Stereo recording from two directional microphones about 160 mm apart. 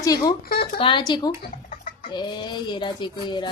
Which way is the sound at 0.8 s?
30° left (ahead or behind).